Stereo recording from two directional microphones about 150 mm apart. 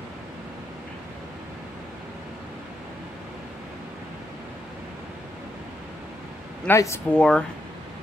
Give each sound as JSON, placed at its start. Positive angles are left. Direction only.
{"t": 6.7, "sound": "speech", "side_deg": 15}
{"t": 7.2, "sound": "speech", "side_deg": 5}